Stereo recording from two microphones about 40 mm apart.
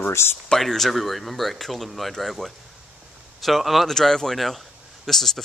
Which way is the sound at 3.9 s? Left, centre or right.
Centre.